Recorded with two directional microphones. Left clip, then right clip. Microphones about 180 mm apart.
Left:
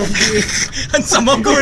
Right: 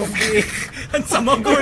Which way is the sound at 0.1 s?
55° left (ahead or behind).